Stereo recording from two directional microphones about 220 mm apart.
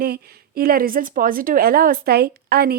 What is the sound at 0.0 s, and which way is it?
A woman's voice, 45° right (ahead or behind).